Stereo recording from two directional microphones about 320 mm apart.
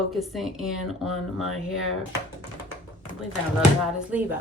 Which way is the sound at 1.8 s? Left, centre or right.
Left.